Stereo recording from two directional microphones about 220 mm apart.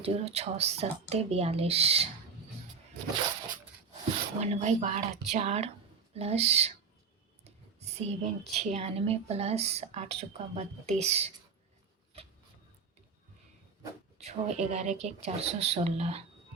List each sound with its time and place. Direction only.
0.0 s a woman's voice: 30° right (ahead or behind)
4.4 s a woman's voice: 30° right (ahead or behind)
7.4 s a sound: 30° right (ahead or behind)
8.7 s a woman's voice: 30° right (ahead or behind)
14.2 s a woman's voice: 30° right (ahead or behind)